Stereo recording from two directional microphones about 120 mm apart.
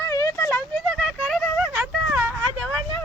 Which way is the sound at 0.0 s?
25° left (ahead or behind).